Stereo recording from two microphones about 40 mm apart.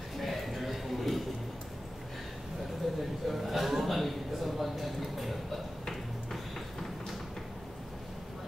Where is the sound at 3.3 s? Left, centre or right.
Centre.